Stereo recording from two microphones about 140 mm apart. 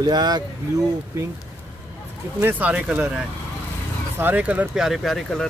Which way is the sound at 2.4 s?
10° right (ahead or behind).